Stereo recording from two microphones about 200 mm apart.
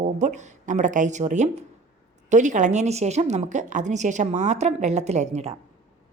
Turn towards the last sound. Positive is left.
turn(degrees=-35)  # may be behind; listen again after turning